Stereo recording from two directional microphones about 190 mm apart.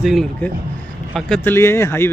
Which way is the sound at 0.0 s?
Centre (ahead or behind).